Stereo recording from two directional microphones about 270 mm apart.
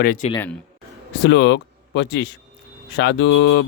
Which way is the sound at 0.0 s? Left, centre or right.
Left.